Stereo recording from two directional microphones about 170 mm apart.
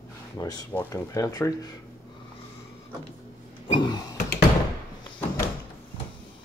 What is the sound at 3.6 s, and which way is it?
Speech, 30° left (ahead or behind).